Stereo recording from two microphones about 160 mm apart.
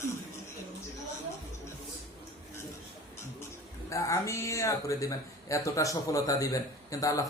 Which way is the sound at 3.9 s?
20° left (ahead or behind).